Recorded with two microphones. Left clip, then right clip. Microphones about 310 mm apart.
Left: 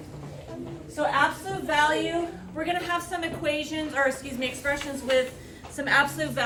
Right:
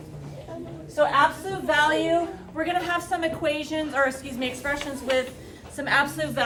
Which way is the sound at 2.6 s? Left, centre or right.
Centre.